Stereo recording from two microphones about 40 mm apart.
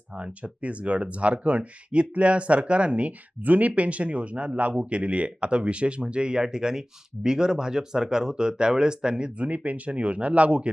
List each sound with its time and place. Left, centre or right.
0.1 s speech: right
9.5 s speech: right